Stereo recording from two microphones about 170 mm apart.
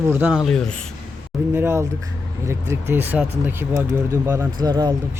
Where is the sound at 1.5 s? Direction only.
15° right (ahead or behind).